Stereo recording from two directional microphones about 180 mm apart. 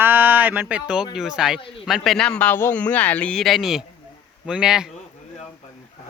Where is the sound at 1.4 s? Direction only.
5° right (ahead or behind).